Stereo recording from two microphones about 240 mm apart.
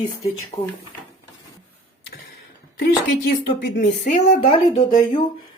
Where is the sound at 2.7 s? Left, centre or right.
Left.